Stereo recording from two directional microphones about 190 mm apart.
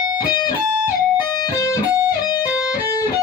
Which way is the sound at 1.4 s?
15° left (ahead or behind).